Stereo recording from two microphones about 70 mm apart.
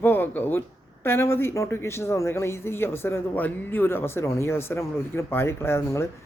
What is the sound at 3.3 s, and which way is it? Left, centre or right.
Speech, left.